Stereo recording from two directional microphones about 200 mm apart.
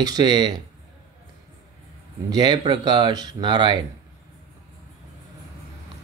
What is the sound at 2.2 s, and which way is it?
Speech, 20° right (ahead or behind).